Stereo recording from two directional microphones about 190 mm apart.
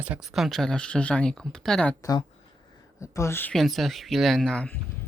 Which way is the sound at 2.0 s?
20° left (ahead or behind).